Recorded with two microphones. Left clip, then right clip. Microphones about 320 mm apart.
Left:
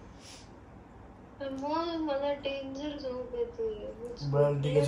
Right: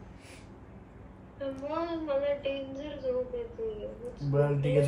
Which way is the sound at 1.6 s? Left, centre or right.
Centre.